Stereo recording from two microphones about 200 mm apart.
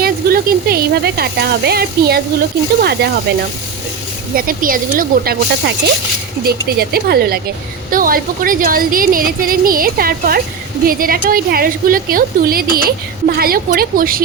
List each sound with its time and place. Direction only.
0.0 s a woman's voice: 50° right (ahead or behind)
4.4 s a woman's voice: 45° right (ahead or behind)